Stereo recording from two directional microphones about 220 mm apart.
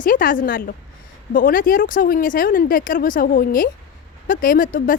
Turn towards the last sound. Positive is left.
turn(degrees=40)  # may be behind; listen again after turning